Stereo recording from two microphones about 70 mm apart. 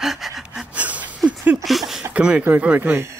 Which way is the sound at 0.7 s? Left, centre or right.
Right.